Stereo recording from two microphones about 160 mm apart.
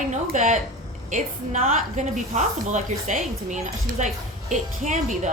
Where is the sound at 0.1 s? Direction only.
50° right (ahead or behind).